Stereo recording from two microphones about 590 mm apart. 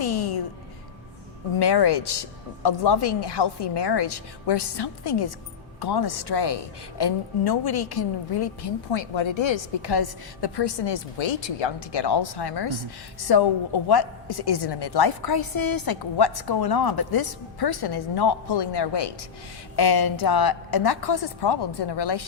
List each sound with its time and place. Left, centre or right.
0.0 s music: left
1.5 s a woman's voice: left